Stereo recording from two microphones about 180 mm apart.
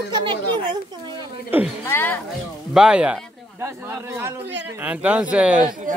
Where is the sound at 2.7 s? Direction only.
5° right (ahead or behind).